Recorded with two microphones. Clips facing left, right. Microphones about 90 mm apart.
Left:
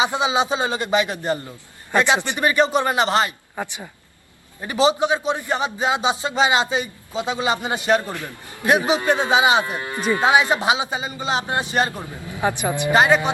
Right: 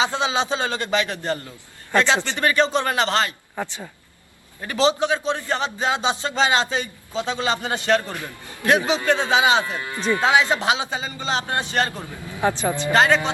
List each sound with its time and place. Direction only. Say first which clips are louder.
0.0 s a man's voice: left 2 dB; 15° left (ahead or behind)